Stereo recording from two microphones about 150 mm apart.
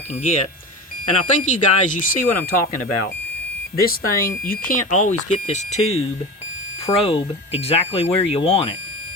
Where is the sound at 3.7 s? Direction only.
80° left.